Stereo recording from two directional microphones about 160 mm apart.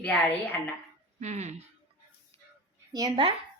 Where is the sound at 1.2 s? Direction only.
45° right (ahead or behind).